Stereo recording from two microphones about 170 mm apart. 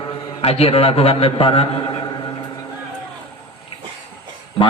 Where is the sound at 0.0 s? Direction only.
35° left (ahead or behind).